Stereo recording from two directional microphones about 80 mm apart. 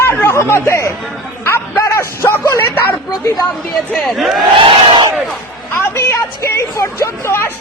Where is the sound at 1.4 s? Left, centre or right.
Left.